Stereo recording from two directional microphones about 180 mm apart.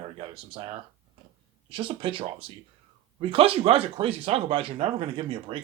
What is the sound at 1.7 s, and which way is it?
Speech, 30° right (ahead or behind).